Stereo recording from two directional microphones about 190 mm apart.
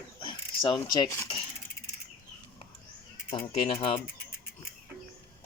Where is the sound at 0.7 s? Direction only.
20° left (ahead or behind).